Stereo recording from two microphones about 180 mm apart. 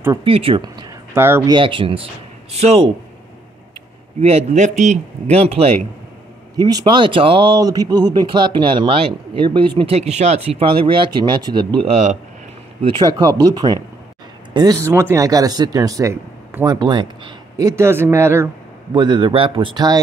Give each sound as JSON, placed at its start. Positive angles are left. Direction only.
{"t": 0.2, "sound": "speech", "side_deg": -30}
{"t": 1.1, "sound": "speech", "side_deg": -15}
{"t": 1.5, "sound": "a man's voice", "side_deg": -30}
{"t": 4.2, "sound": "a man's voice", "side_deg": -35}
{"t": 6.5, "sound": "speech", "side_deg": -20}
{"t": 12.8, "sound": "speech", "side_deg": -25}
{"t": 18.9, "sound": "speech", "side_deg": -25}